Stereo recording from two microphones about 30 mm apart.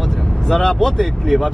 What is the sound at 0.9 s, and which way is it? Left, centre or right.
Speech, centre.